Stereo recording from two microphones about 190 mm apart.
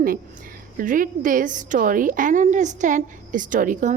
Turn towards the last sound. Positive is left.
turn(degrees=-40)  # may be behind; listen again after turning